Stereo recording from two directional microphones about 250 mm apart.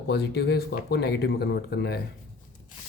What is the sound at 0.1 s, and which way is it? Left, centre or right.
Speech, left.